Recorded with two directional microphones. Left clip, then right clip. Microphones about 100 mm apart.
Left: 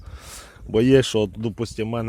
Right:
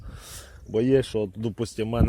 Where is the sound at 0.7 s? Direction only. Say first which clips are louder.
Left 5 dB; 60° left (ahead or behind); by 1.3 s 85° left.